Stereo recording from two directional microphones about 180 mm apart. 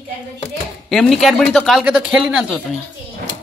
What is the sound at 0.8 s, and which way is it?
A man's voice, centre (ahead or behind).